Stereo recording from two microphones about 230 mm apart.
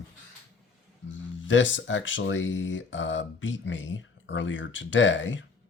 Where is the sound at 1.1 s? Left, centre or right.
Left.